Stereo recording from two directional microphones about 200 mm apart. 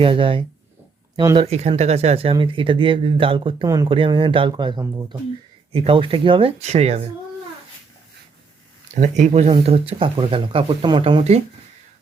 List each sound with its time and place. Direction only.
0.0 s speech: 25° right (ahead or behind)
1.5 s speech: 35° right (ahead or behind)
9.0 s speech: 35° right (ahead or behind)